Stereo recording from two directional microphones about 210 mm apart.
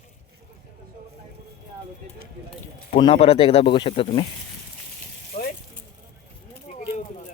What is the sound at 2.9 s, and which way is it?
Speech, 25° left (ahead or behind).